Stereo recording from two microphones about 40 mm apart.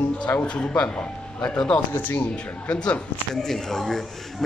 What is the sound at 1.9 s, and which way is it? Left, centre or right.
Speech, left.